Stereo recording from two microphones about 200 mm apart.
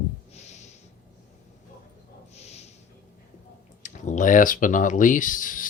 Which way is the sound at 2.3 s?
30° left (ahead or behind).